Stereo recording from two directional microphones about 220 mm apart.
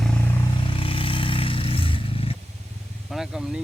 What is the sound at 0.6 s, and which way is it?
Vehicle, 25° left (ahead or behind).